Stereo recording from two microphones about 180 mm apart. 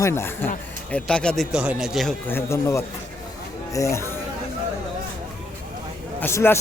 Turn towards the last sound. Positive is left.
turn(degrees=15)  # may be behind; listen again after turning